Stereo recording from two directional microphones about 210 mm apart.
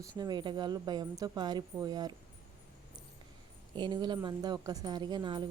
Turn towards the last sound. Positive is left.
turn(degrees=-20)  # may be behind; listen again after turning